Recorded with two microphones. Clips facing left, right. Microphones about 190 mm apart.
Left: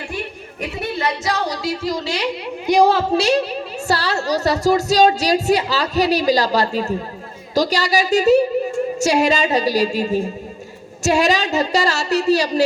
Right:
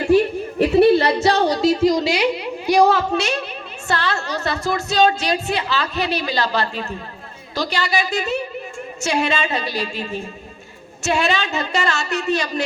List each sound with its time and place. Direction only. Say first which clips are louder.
0.6 s a woman's voice: right 10 dB; 35° right (ahead or behind); by 2.2 s 15° right (ahead or behind)
2.6 s a woman's voice: left 1 dB; 25° left (ahead or behind)